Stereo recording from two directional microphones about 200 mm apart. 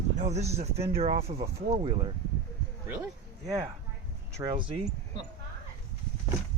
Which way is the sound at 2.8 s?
10° right (ahead or behind).